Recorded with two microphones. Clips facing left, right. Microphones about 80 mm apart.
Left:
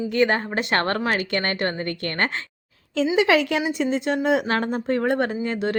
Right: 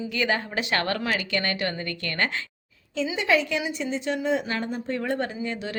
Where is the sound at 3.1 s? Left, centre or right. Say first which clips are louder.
Left 5 dB; left.